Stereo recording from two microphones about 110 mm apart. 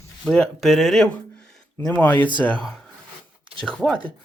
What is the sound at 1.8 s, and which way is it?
Speech, 15° left (ahead or behind).